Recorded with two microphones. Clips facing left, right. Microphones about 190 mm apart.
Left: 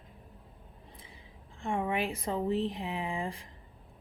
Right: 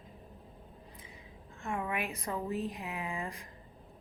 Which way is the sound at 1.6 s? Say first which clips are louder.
Left 4 dB; 30° left (ahead or behind).